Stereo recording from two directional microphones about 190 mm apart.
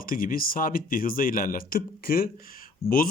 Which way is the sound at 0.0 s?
50° left (ahead or behind).